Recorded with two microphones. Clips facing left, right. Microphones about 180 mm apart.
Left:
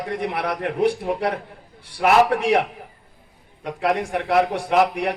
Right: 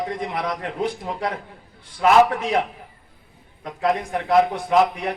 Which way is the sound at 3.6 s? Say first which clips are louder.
Left 1 dB; 75° left (ahead or behind).